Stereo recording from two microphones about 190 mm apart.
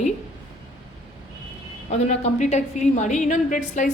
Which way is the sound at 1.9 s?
35° left (ahead or behind).